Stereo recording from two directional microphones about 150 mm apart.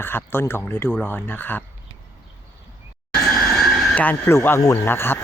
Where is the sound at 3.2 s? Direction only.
Centre (ahead or behind).